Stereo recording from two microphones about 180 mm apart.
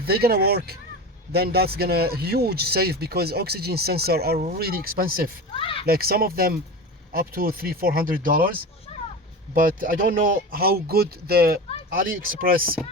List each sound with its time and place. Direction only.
0.0 s speech: 60° right (ahead or behind)
5.5 s speech: 30° left (ahead or behind)
5.8 s speech: 55° right (ahead or behind)
8.9 s a sound: 35° left (ahead or behind)
9.6 s speech: 50° right (ahead or behind)